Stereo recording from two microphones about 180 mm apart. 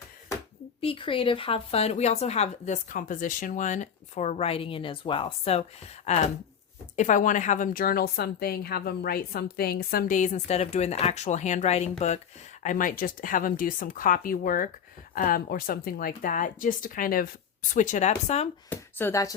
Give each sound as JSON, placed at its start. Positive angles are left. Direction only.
{"t": 0.8, "sound": "a woman's voice", "side_deg": 30}
{"t": 12.6, "sound": "a woman's voice", "side_deg": 50}
{"t": 18.7, "sound": "speech", "side_deg": 10}